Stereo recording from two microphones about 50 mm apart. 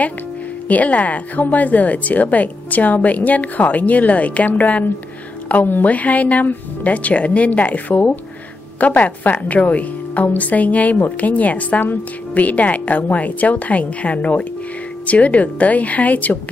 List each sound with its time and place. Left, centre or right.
0.7 s speech: left